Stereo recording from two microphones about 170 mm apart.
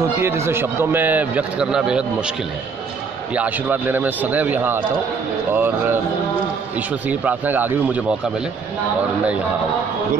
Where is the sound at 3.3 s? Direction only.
10° right (ahead or behind).